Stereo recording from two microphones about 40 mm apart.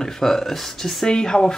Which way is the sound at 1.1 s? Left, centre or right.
Centre.